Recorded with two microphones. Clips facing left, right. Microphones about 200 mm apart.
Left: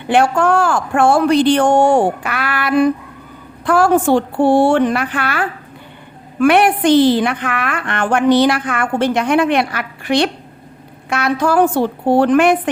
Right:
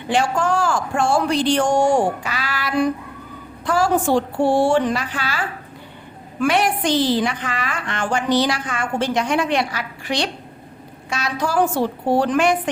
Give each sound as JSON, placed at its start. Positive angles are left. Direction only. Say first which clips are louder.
{"t": 0.1, "sound": "a woman's voice", "louder": "left 6 dB", "side_deg": 60}